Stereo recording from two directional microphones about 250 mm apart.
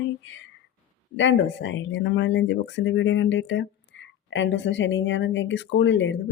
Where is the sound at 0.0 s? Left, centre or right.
Left.